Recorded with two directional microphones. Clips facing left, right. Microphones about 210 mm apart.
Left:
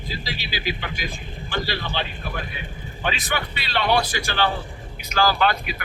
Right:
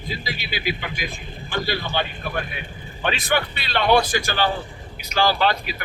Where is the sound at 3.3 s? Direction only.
50° right (ahead or behind).